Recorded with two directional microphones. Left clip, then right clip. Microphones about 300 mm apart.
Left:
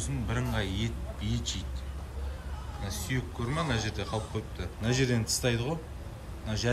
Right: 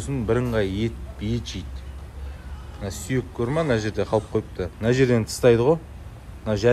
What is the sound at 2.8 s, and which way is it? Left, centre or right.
Speech, left.